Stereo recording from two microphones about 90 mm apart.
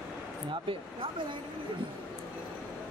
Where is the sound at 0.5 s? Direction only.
75° right (ahead or behind).